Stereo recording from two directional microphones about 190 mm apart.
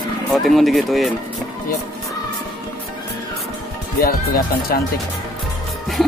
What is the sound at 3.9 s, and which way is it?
Speech, 50° left (ahead or behind).